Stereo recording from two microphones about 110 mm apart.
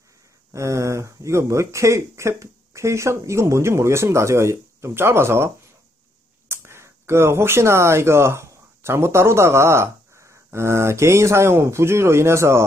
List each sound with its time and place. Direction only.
0.5 s speech: 25° right (ahead or behind)
6.5 s speech: 25° right (ahead or behind)